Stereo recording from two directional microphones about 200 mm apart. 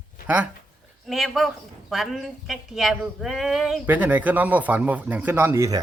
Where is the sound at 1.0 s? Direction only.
Centre (ahead or behind).